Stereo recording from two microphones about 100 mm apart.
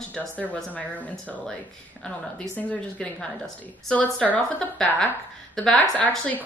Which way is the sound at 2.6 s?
10° left (ahead or behind).